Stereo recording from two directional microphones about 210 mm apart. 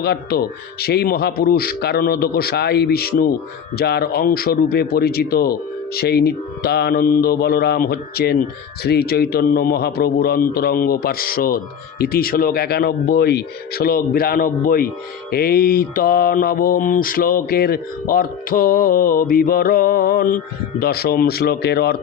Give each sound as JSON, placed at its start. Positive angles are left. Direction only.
{"t": 0.0, "sound": "mantra", "side_deg": 50}